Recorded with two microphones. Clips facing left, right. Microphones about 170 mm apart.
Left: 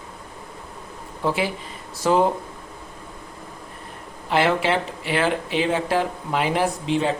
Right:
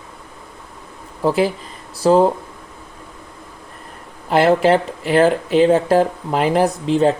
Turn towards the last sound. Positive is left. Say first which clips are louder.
# right 6 dB
turn(degrees=-40)  # may be behind; listen again after turning